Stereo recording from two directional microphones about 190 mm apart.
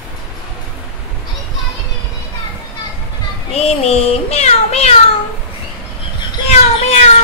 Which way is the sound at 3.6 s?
35° left (ahead or behind).